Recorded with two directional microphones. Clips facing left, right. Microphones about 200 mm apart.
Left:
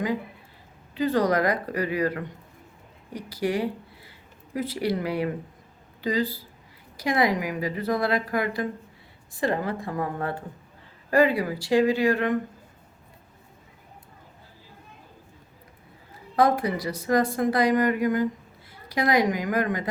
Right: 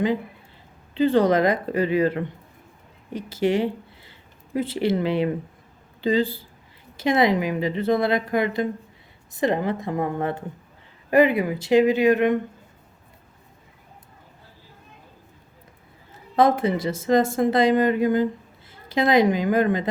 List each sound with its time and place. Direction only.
0.9 s speech: 25° right (ahead or behind)
16.3 s a woman's voice: 25° right (ahead or behind)